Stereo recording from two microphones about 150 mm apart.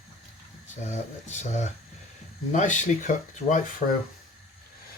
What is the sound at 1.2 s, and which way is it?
Speech, 50° left (ahead or behind).